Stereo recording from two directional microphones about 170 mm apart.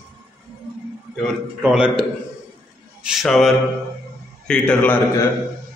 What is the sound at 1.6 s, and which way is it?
A man's voice, 5° right (ahead or behind).